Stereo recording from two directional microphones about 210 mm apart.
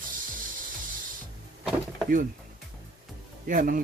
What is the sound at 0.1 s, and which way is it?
Ratchet, 40° right (ahead or behind).